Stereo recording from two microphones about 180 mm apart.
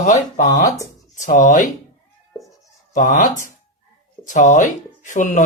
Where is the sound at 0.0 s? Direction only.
45° left (ahead or behind).